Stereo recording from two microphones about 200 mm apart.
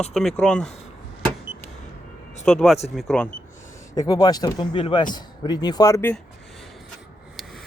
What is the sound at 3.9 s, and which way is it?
Speech, 20° left (ahead or behind).